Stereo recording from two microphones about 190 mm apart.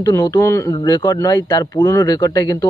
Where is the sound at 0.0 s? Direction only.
20° left (ahead or behind).